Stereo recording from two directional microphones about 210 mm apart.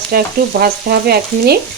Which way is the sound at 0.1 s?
45° right (ahead or behind).